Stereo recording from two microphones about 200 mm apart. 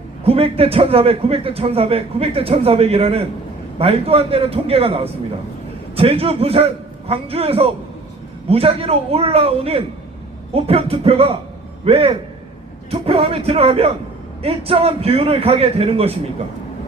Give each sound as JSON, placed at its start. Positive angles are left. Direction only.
{"t": 0.3, "sound": "a man's voice", "side_deg": -30}